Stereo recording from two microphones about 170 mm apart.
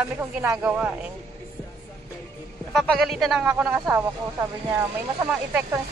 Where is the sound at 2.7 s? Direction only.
Centre (ahead or behind).